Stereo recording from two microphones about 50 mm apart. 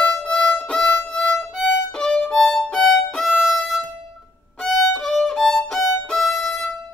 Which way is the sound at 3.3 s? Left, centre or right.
Centre.